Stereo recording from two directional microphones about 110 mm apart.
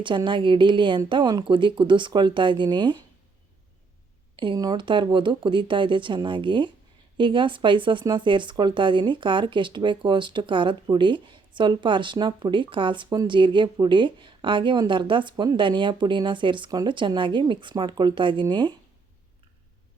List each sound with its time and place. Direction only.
0.3 s speech: 50° right (ahead or behind)
4.5 s speech: 40° right (ahead or behind)